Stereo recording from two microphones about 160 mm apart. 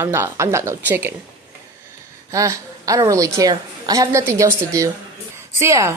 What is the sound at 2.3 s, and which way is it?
A woman's voice, 20° right (ahead or behind).